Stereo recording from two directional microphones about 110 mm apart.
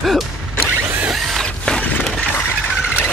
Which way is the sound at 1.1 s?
Centre (ahead or behind).